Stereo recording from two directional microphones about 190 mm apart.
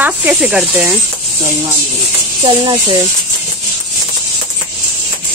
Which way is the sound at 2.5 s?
25° right (ahead or behind).